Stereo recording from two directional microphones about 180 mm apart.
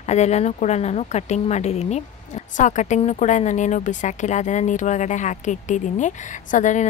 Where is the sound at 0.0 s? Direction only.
40° left (ahead or behind).